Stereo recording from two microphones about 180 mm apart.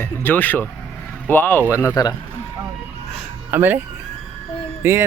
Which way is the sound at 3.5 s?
10° right (ahead or behind).